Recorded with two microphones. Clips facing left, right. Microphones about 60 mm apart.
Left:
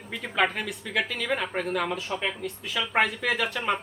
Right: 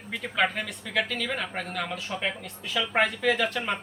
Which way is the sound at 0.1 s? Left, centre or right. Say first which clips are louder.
Left 1 dB; centre.